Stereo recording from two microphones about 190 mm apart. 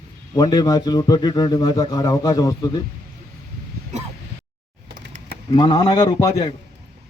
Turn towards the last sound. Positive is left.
turn(degrees=25)  # may be behind; listen again after turning